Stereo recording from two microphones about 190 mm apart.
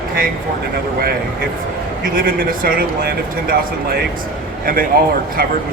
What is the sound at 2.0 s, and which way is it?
A man's voice, 50° right (ahead or behind).